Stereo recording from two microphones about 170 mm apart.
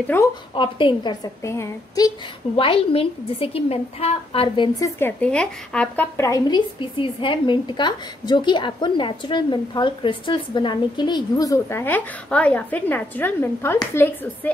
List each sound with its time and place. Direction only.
0.0 s a woman's voice: 10° left (ahead or behind)
0.6 s a woman's voice: 30° left (ahead or behind)
2.5 s a woman's voice: 35° left (ahead or behind)
4.7 s a woman's voice: 15° left (ahead or behind)